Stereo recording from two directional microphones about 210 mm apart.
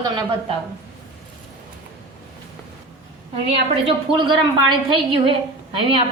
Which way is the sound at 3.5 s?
25° right (ahead or behind).